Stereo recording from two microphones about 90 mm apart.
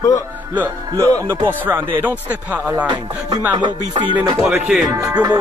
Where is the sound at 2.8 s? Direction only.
55° right (ahead or behind).